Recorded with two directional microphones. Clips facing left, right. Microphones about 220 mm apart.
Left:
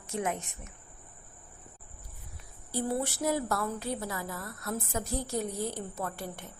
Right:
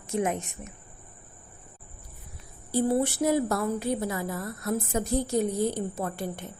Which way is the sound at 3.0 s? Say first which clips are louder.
Right 6 dB; 20° right (ahead or behind).